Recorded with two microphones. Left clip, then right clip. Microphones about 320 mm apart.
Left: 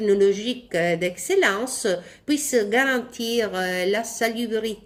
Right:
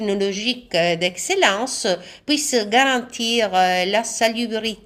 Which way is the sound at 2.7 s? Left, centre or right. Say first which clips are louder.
Right 7 dB; right.